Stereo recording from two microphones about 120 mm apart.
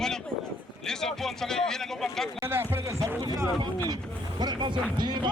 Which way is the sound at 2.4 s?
20° right (ahead or behind).